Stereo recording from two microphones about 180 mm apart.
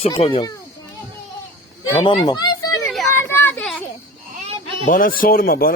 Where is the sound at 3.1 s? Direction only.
10° left (ahead or behind).